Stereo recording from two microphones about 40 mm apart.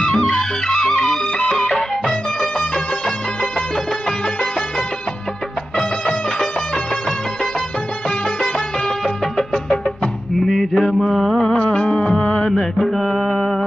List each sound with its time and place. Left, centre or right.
0.7 s music: centre
5.7 s music: centre
9.0 s music: centre
10.6 s mantra: centre
11.6 s music: left
12.5 s music: centre
13.0 s mantra: centre
13.4 s a sound: centre